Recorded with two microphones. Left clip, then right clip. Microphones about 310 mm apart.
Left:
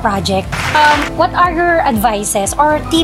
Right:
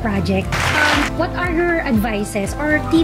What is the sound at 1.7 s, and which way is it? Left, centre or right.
Speech, left.